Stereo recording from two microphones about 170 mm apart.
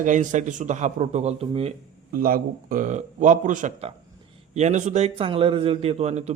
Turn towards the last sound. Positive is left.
turn(degrees=-40)  # may be behind; listen again after turning